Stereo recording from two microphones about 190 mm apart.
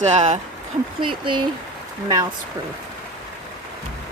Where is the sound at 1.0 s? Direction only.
25° right (ahead or behind).